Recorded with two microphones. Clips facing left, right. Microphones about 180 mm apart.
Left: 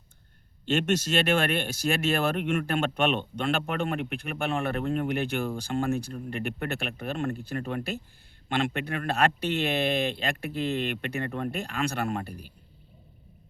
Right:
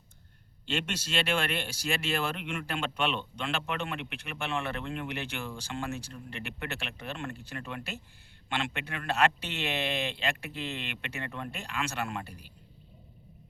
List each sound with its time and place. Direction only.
0.7 s a man's voice: 50° left (ahead or behind)